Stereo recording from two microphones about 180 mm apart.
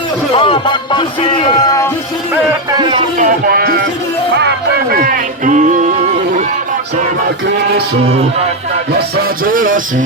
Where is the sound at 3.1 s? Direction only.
50° right (ahead or behind).